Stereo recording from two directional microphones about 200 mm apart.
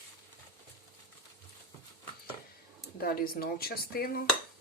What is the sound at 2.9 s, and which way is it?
Speech, 50° left (ahead or behind).